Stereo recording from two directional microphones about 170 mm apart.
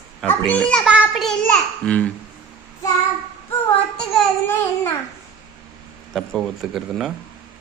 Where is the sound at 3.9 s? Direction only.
10° left (ahead or behind).